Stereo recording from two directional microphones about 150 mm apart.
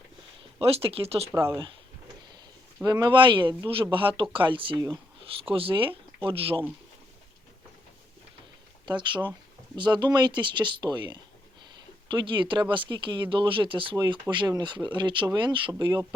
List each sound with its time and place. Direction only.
0.6 s speech: 40° right (ahead or behind)
1.3 s speech: 20° right (ahead or behind)
2.8 s speech: 30° right (ahead or behind)
8.9 s speech: 30° right (ahead or behind)